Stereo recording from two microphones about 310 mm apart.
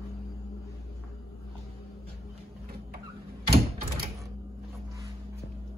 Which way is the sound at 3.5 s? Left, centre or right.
Right.